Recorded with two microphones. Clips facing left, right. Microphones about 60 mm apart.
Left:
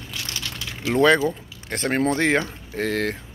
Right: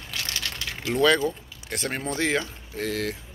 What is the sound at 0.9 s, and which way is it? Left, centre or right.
Speech, left.